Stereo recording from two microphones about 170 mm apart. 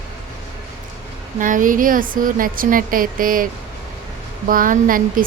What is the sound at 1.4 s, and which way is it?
Speech, 50° right (ahead or behind).